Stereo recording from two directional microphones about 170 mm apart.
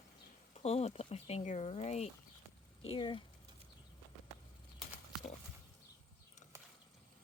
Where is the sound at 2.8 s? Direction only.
30° left (ahead or behind).